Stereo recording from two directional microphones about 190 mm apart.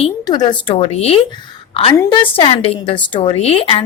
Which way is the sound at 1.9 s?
20° left (ahead or behind).